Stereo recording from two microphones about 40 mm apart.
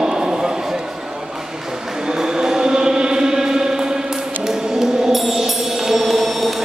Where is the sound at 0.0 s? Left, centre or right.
Centre.